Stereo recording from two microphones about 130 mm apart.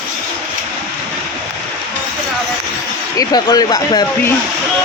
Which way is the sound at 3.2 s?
30° left (ahead or behind).